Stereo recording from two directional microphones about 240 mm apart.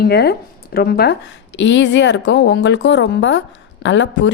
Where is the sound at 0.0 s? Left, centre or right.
Left.